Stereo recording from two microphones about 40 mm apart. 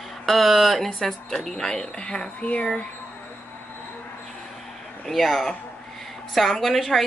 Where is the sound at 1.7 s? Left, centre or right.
Left.